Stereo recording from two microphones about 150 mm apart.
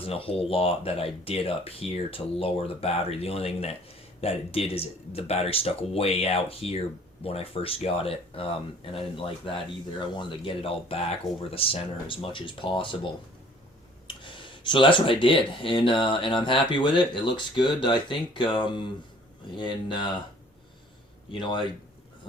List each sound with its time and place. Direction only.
0.0 s speech: 40° left (ahead or behind)
14.1 s speech: 35° left (ahead or behind)
21.3 s speech: 30° left (ahead or behind)